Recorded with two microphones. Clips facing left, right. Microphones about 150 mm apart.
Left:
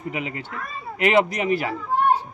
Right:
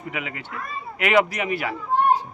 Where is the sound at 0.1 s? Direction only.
30° left (ahead or behind).